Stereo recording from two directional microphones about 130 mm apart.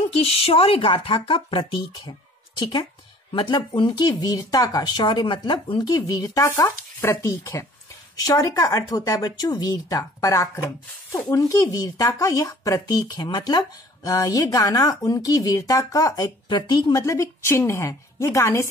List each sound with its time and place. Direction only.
0.2 s speech: 50° left (ahead or behind); by 18.7 s 20° left (ahead or behind)